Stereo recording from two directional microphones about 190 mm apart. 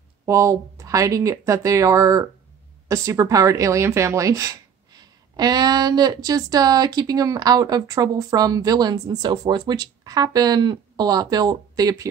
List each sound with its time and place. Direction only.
0.2 s speech: 15° right (ahead or behind)